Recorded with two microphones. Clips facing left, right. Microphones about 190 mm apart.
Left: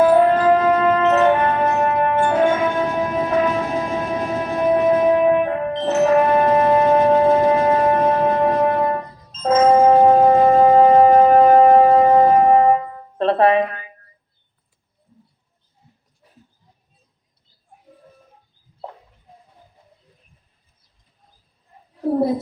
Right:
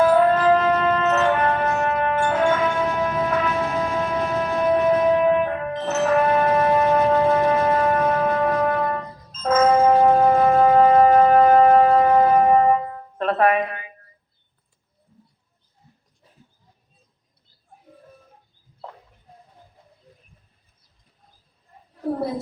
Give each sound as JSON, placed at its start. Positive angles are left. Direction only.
{"t": 0.0, "sound": "shofar", "side_deg": 30}
{"t": 0.8, "sound": "music", "side_deg": 30}
{"t": 5.5, "sound": "brass instrument", "side_deg": 30}
{"t": 13.1, "sound": "music", "side_deg": 30}